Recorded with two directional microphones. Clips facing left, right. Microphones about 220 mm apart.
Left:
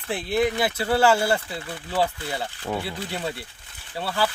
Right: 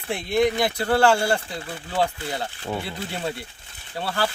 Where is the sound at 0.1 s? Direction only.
5° left (ahead or behind).